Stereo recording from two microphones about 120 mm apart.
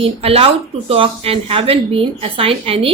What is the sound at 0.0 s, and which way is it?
A woman's voice, 55° right (ahead or behind).